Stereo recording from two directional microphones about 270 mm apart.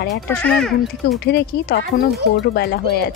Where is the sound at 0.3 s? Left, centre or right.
Centre.